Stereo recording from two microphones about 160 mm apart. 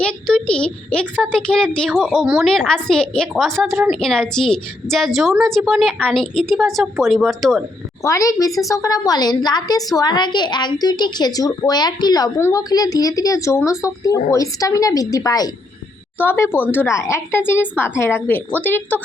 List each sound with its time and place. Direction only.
0.0 s a woman's voice: 5° left (ahead or behind)
8.0 s a woman's voice: 20° left (ahead or behind)